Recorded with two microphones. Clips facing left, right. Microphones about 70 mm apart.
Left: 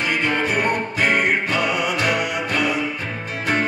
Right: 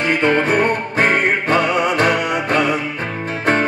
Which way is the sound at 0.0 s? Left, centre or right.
Right.